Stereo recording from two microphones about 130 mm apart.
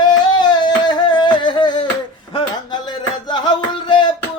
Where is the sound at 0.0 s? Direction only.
35° left (ahead or behind).